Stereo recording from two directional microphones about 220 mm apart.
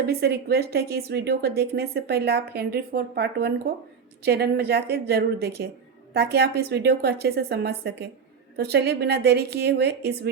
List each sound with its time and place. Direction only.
0.1 s speech: 45° right (ahead or behind)